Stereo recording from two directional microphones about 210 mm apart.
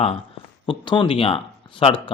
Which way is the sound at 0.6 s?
25° left (ahead or behind).